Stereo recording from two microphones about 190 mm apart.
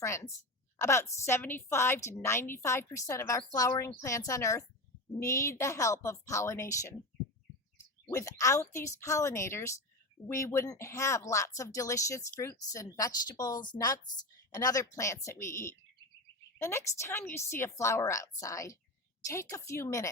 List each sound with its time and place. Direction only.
0.0 s speech: 15° left (ahead or behind)
8.1 s speech: 15° left (ahead or behind)